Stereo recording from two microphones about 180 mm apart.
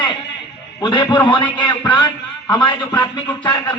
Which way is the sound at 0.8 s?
25° left (ahead or behind).